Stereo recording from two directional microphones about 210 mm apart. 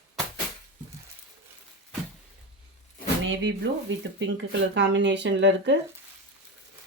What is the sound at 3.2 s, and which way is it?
Speech, 60° right (ahead or behind).